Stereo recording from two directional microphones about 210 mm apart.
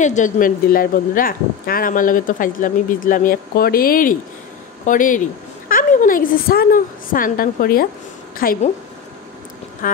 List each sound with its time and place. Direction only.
0.0 s a woman's voice: 35° left (ahead or behind)